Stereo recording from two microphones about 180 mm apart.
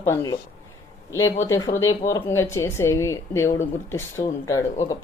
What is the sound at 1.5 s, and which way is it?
A woman's voice, 20° left (ahead or behind).